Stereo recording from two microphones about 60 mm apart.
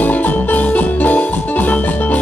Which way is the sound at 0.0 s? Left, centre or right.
Left.